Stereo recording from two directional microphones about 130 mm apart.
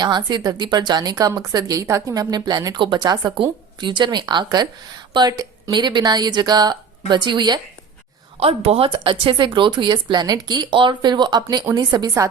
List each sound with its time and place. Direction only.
0.0 s speech: 35° right (ahead or behind)
8.4 s speech: 50° right (ahead or behind); by 12.3 s 30° right (ahead or behind)